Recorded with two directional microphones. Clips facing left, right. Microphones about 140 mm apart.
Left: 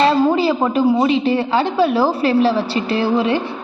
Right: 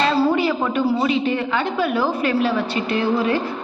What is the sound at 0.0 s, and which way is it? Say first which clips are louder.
A woman's voice: left 4 dB; 30° left (ahead or behind).